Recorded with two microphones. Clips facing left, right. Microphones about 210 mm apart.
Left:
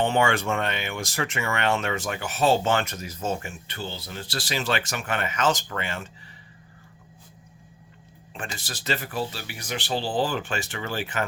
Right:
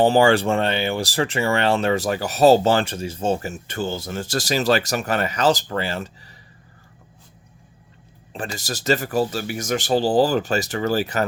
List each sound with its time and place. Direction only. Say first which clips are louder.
0.0 s speech: right 7 dB; 35° right (ahead or behind)
8.3 s speech: right 7 dB; 35° right (ahead or behind)